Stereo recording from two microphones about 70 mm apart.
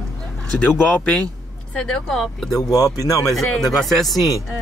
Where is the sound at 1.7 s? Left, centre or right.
Centre.